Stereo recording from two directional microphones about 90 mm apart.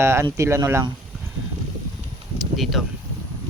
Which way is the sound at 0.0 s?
30° right (ahead or behind).